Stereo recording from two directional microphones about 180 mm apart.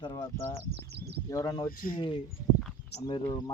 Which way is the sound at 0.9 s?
65° right (ahead or behind).